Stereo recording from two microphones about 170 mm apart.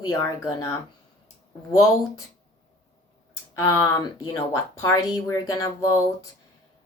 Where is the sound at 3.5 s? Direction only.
20° left (ahead or behind).